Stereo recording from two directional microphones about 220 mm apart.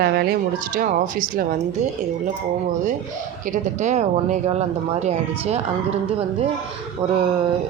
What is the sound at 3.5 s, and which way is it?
Speech, 35° right (ahead or behind).